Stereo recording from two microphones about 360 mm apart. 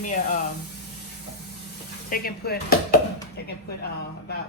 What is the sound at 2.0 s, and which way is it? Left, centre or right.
Chopping, left.